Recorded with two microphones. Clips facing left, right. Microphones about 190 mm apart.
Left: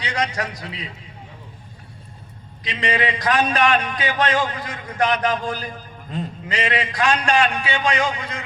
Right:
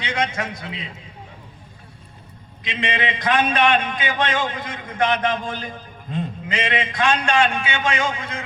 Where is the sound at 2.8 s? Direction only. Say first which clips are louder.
Left 2 dB; 40° left (ahead or behind).